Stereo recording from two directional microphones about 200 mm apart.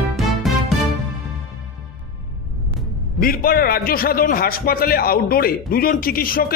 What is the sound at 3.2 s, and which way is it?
A man's voice, 45° left (ahead or behind).